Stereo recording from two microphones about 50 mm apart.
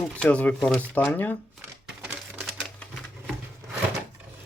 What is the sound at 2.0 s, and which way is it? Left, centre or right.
Typewriter, right.